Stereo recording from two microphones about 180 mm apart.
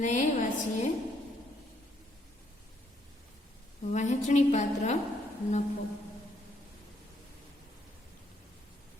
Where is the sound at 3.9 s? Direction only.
40° left (ahead or behind).